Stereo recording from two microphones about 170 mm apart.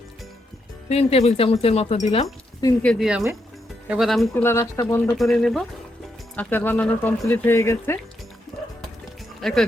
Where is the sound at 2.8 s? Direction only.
5° left (ahead or behind).